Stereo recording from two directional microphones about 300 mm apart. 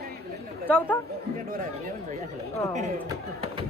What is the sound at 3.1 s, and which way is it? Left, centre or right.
Speech, centre.